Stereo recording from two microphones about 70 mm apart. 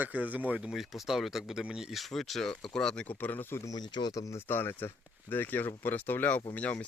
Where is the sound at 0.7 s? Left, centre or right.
Centre.